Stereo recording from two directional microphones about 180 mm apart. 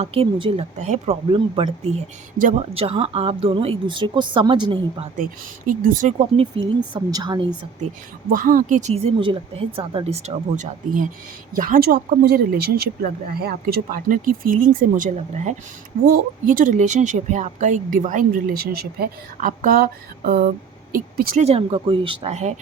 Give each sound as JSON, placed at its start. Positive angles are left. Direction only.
{"t": 0.0, "sound": "speech", "side_deg": -35}
{"t": 5.6, "sound": "speech", "side_deg": -50}
{"t": 6.9, "sound": "a woman's voice", "side_deg": -25}
{"t": 8.3, "sound": "speech", "side_deg": -50}
{"t": 16.0, "sound": "speech", "side_deg": -55}
{"t": 21.4, "sound": "speech", "side_deg": -35}